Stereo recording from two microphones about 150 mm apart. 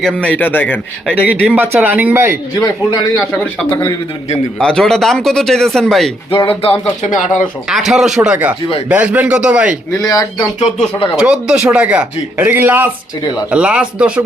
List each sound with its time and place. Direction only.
0.0 s a man's voice: 5° left (ahead or behind)
1.1 s speech: 10° right (ahead or behind)
2.6 s a man's voice: 25° left (ahead or behind)
4.6 s speech: 5° left (ahead or behind)
6.3 s speech: 35° left (ahead or behind)
7.0 s speech: 60° left (ahead or behind)
7.7 s speech: 5° right (ahead or behind)
9.9 s a man's voice: 25° left (ahead or behind)
11.2 s speech: 5° right (ahead or behind)